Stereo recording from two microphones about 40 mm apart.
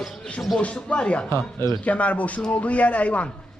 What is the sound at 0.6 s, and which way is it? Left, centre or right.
Speech, left.